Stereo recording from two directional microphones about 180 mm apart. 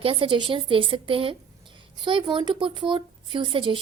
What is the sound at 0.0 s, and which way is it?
Speech, 30° right (ahead or behind).